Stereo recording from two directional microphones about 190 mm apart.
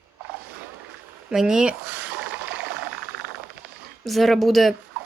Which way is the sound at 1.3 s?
5° right (ahead or behind).